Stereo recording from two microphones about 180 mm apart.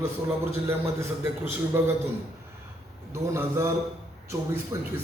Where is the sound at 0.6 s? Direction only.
15° right (ahead or behind).